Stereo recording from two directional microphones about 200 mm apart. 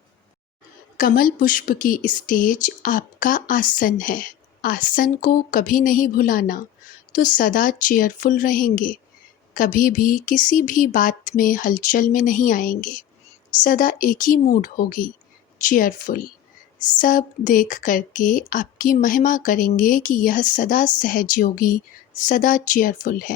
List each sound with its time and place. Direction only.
0.9 s a woman's voice: 45° left (ahead or behind)